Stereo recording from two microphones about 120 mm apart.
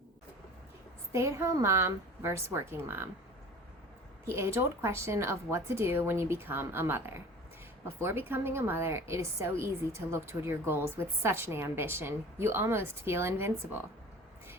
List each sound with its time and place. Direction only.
1.1 s a woman's voice: 25° right (ahead or behind)
4.3 s a woman's voice: 25° right (ahead or behind)